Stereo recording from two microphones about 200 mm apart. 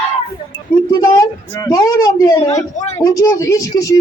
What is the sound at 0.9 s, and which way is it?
A woman's voice, 20° left (ahead or behind).